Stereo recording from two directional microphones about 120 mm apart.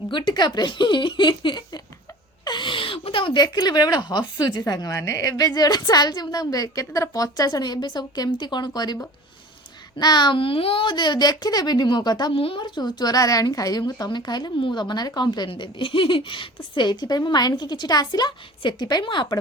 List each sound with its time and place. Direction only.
0.1 s a woman's voice: 40° left (ahead or behind)
10.0 s a woman's voice: 35° left (ahead or behind)
12.3 s a woman's voice: 50° left (ahead or behind)